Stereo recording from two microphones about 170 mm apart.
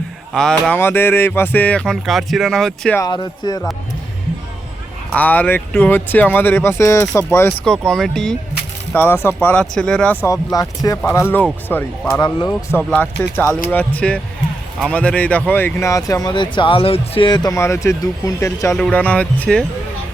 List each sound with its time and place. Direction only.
0.3 s speech: 5° left (ahead or behind)
0.8 s speech: 15° left (ahead or behind)
3.0 s speech: 25° left (ahead or behind)
5.1 s speech: 10° left (ahead or behind)
7.6 s speech: 5° left (ahead or behind)
18.7 s speech: 5° left (ahead or behind)